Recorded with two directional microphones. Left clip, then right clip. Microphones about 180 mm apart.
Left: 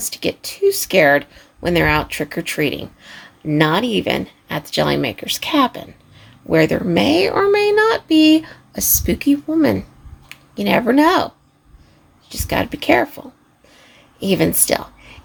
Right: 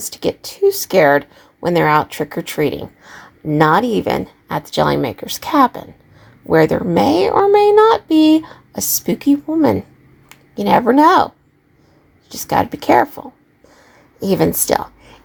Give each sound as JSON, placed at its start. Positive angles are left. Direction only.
{"t": 0.0, "sound": "speech", "side_deg": -15}
{"t": 6.5, "sound": "speech", "side_deg": 10}
{"t": 6.7, "sound": "speech", "side_deg": -10}
{"t": 12.3, "sound": "speech", "side_deg": -15}